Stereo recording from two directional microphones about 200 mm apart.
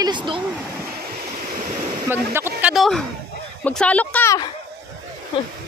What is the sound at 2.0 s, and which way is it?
Speech, 10° right (ahead or behind).